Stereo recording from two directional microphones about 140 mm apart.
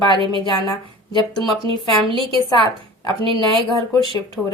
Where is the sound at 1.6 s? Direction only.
35° right (ahead or behind).